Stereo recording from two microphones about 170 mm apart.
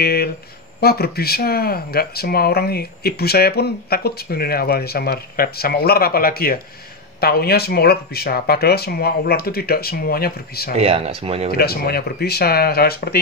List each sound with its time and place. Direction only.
0.0 s speech: 65° left (ahead or behind)
10.7 s speech: 35° right (ahead or behind)
11.5 s speech: 65° left (ahead or behind)